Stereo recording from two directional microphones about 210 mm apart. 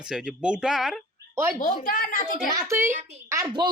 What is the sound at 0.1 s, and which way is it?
Speech, 5° right (ahead or behind).